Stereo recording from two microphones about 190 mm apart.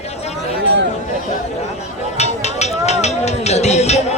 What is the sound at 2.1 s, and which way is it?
Music, 35° left (ahead or behind).